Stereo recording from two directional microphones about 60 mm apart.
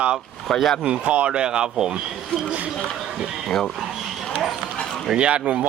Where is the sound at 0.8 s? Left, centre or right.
Right.